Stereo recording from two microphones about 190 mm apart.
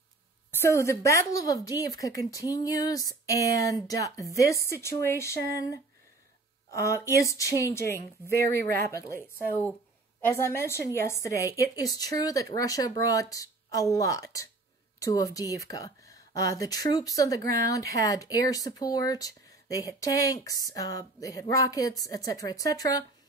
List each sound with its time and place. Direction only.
0.5 s speech: 15° left (ahead or behind)